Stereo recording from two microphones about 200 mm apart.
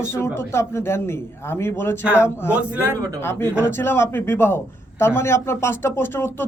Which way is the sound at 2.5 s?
5° right (ahead or behind).